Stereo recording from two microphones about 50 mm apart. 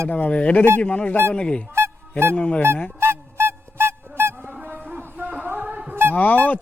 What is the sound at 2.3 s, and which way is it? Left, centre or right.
Speech, left.